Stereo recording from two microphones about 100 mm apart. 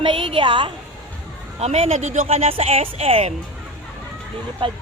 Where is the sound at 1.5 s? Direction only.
90° right.